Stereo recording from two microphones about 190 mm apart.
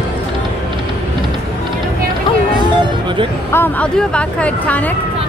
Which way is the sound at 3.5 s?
10° left (ahead or behind).